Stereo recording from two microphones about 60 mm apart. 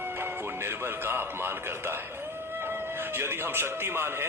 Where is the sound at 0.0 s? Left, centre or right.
Right.